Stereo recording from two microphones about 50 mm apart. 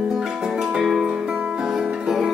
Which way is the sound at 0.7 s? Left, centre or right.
Centre.